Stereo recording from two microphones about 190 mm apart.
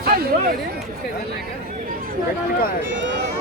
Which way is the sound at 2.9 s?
75° right (ahead or behind).